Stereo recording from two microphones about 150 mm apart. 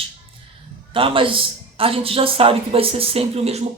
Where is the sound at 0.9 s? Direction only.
35° right (ahead or behind).